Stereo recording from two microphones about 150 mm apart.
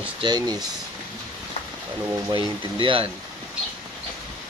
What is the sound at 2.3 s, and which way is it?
Speech, 35° right (ahead or behind).